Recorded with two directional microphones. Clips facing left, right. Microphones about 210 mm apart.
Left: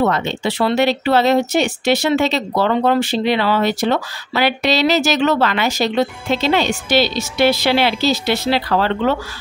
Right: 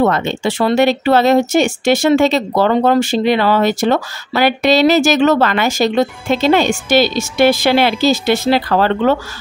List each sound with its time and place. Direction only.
0.0 s speech: 50° right (ahead or behind)